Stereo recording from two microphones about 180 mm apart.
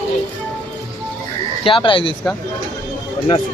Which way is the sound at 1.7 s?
30° left (ahead or behind).